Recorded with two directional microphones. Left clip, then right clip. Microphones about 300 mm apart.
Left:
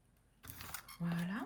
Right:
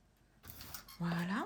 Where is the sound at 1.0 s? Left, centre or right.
Centre.